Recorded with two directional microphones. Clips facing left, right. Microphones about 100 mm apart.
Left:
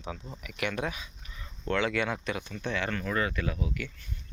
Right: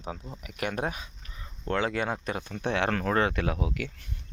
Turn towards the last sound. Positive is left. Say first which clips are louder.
# right 3 dB
turn(degrees=-90)